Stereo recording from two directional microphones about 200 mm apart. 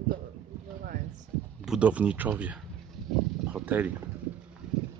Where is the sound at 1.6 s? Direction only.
5° right (ahead or behind).